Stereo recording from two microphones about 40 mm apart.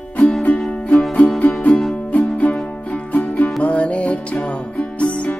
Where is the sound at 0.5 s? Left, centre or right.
Left.